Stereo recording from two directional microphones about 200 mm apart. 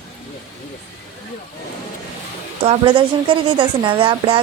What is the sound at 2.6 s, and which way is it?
A woman's voice, 30° right (ahead or behind).